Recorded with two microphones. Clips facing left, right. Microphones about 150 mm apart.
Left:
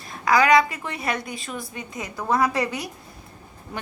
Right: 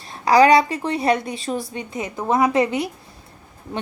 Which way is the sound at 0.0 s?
30° right (ahead or behind).